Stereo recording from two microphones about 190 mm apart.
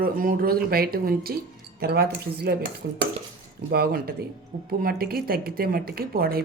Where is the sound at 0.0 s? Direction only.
50° right (ahead or behind).